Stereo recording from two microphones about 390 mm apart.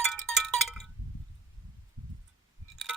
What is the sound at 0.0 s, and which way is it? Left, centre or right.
Wind chime, centre.